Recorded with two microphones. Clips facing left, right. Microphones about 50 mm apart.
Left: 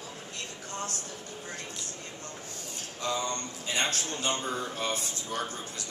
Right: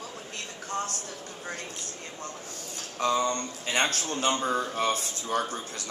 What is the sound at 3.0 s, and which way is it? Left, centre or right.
Speech, right.